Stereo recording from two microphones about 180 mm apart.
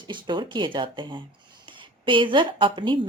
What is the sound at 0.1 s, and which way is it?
A woman's voice, 25° right (ahead or behind).